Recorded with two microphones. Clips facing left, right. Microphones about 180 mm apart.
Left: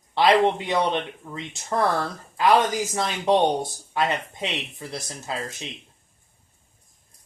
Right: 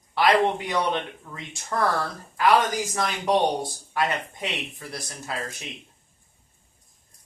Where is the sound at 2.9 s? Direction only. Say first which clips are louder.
Left 2 dB; 25° left (ahead or behind).